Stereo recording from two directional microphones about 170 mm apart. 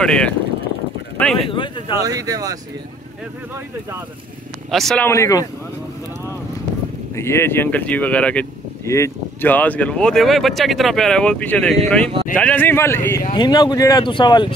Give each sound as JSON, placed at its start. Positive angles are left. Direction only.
{"t": 0.0, "sound": "speech", "side_deg": 5}
{"t": 1.1, "sound": "a sound", "side_deg": 5}
{"t": 1.5, "sound": "speech", "side_deg": 30}
{"t": 2.0, "sound": "speech", "side_deg": -20}
{"t": 4.6, "sound": "speech", "side_deg": 0}
{"t": 5.0, "sound": "speech", "side_deg": 15}
{"t": 7.2, "sound": "speech", "side_deg": 15}
{"t": 13.3, "sound": "speech", "side_deg": 25}